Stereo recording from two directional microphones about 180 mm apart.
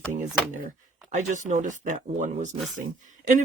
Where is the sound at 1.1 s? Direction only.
45° right (ahead or behind).